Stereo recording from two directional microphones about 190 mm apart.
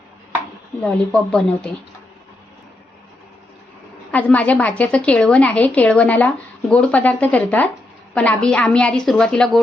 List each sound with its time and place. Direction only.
0.8 s a woman's voice: 5° left (ahead or behind)
4.1 s a woman's voice: 10° left (ahead or behind)